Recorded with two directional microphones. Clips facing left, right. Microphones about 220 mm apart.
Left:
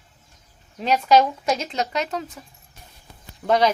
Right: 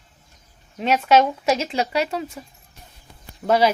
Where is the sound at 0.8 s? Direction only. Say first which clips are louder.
Right 1 dB; 5° right (ahead or behind).